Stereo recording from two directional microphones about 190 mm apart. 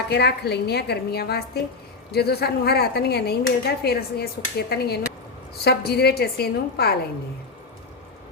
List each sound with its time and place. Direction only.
0.1 s speech: 60° left (ahead or behind)